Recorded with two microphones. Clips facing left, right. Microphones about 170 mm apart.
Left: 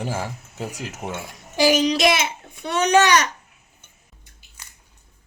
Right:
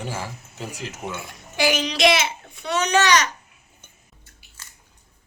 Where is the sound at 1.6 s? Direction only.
40° left (ahead or behind); by 2.9 s 55° left (ahead or behind).